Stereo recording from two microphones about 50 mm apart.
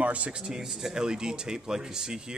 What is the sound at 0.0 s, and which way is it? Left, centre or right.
Speech, right.